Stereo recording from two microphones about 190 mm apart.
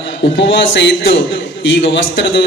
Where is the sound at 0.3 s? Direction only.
75° left (ahead or behind).